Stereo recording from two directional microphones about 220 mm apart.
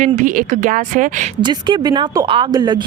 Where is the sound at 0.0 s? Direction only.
35° right (ahead or behind).